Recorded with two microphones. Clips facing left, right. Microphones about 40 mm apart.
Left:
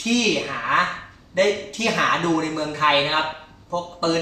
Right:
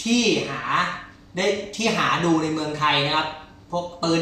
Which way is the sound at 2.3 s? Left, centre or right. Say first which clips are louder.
Even; left.